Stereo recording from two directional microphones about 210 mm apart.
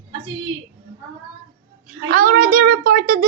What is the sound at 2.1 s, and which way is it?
A woman's voice, 40° right (ahead or behind).